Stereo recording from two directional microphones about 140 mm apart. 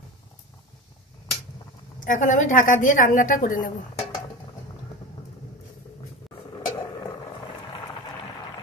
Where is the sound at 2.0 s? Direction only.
65° left (ahead or behind).